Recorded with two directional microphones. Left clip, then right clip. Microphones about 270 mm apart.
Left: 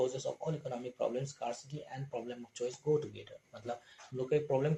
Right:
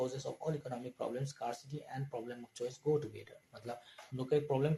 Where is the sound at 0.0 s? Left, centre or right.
Right.